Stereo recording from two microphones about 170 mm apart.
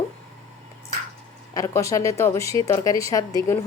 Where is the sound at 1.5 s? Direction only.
20° left (ahead or behind).